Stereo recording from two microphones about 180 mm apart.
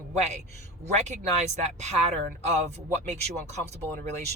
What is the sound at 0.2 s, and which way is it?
Speech, 40° right (ahead or behind).